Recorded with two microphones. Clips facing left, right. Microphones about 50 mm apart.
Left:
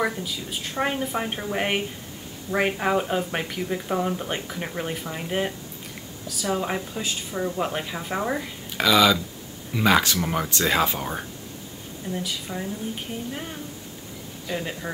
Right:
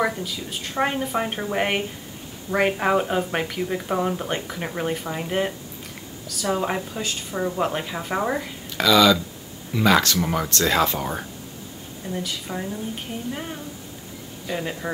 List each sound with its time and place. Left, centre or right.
0.0 s a woman's voice: centre
8.7 s speech: centre
10.1 s a woman's voice: centre
12.1 s a woman's voice: centre